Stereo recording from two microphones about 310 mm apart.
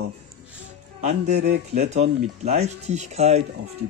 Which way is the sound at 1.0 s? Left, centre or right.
Right.